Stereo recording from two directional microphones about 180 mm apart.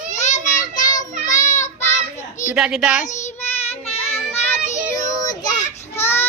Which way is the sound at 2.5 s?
5° right (ahead or behind).